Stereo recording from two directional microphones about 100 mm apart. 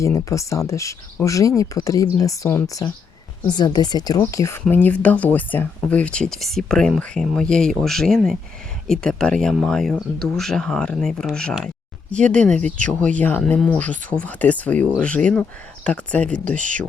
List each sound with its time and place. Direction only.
0.0 s speech: 30° left (ahead or behind)
3.4 s speech: 45° left (ahead or behind)
4.3 s speech: 30° left (ahead or behind)
4.7 s speech: 15° left (ahead or behind)